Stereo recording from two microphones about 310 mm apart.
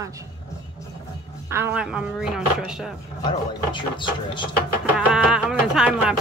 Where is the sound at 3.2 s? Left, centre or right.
Centre.